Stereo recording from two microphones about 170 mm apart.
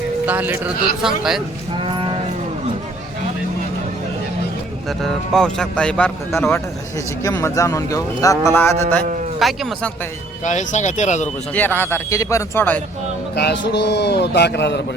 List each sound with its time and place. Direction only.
0.3 s speech: 10° right (ahead or behind)
1.7 s livestock: 30° right (ahead or behind)
4.9 s speech: 5° left (ahead or behind)
7.2 s a man's voice: 20° left (ahead or behind)
9.4 s speech: centre (ahead or behind)
10.4 s speech: 45° left (ahead or behind)
11.5 s a man's voice: 10° left (ahead or behind)
13.3 s a man's voice: 75° left (ahead or behind)